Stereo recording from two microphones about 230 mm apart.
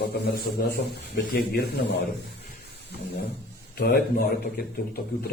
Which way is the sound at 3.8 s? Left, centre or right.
Left.